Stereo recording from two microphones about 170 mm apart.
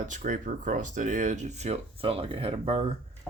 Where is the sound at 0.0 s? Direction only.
50° right (ahead or behind).